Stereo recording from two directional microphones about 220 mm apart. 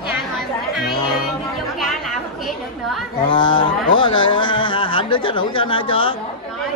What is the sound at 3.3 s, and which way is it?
Speech, 20° left (ahead or behind).